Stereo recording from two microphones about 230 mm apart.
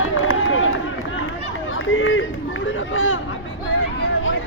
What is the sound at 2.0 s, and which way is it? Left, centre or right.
Run, left.